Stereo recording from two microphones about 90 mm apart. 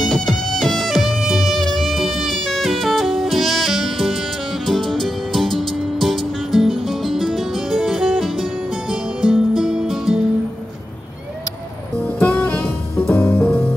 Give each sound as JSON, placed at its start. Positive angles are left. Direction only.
{"t": 0.0, "sound": "music", "side_deg": 5}
{"t": 12.2, "sound": "music", "side_deg": 20}